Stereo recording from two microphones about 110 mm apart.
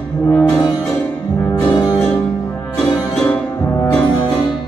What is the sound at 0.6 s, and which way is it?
Music, 35° left (ahead or behind).